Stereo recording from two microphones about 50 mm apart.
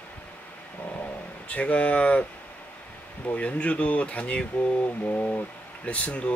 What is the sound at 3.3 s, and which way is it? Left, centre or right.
Speech, left.